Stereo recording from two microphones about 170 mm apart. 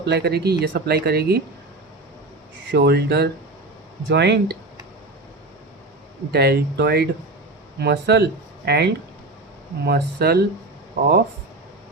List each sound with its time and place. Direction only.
0.0 s speech: 75° right (ahead or behind)
2.7 s speech: 70° right (ahead or behind)
4.1 s speech: 85° right
6.3 s speech: 70° right (ahead or behind)